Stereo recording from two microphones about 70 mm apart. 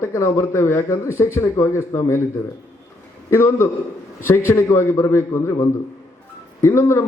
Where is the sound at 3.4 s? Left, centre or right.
Left.